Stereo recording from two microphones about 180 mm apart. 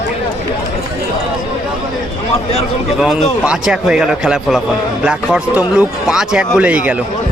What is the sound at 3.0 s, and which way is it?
A man's voice, centre (ahead or behind).